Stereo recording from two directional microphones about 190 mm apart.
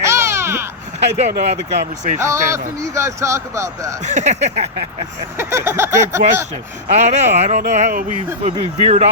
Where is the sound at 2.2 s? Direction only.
15° right (ahead or behind).